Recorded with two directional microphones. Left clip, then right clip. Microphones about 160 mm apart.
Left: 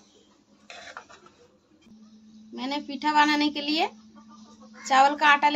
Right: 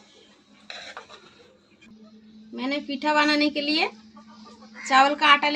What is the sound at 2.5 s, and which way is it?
A woman's voice, 25° left (ahead or behind).